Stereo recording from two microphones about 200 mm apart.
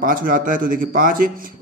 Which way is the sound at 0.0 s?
45° right (ahead or behind).